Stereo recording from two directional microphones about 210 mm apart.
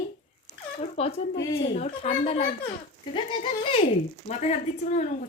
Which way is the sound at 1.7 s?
30° left (ahead or behind).